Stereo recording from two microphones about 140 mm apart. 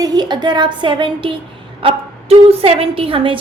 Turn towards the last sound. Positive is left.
turn(degrees=-40)  # may be behind; listen again after turning